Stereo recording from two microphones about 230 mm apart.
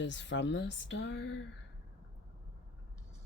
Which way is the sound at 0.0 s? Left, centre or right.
Left.